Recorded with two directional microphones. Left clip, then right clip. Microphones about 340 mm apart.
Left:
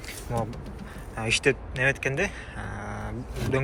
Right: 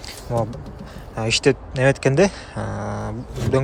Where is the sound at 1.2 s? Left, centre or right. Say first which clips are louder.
Right 5 dB; centre.